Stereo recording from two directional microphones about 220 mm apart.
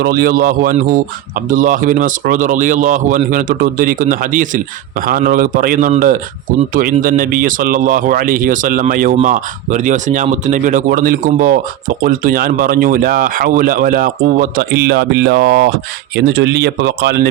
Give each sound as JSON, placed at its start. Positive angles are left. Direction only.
{"t": 0.0, "sound": "speech", "side_deg": -40}